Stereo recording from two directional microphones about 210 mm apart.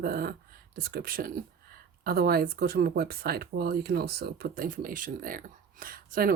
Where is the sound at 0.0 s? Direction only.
45° right (ahead or behind).